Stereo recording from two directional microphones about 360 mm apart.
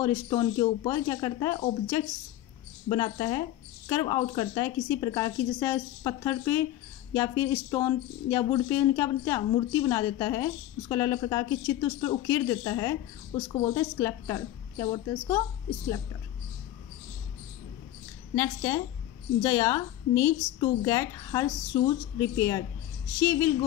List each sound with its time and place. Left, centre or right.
0.0 s speech: centre
18.3 s speech: centre